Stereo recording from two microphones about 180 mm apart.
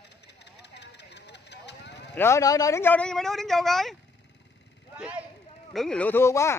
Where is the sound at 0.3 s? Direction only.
70° left (ahead or behind).